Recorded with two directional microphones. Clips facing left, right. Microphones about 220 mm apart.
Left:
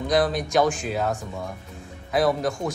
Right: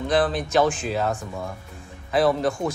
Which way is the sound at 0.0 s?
Centre (ahead or behind).